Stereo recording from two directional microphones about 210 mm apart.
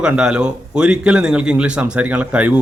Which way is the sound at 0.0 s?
5° right (ahead or behind).